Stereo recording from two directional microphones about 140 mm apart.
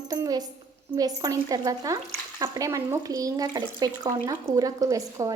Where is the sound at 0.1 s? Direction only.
25° right (ahead or behind).